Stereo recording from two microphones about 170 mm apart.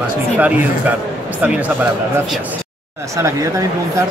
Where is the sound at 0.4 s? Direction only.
10° right (ahead or behind).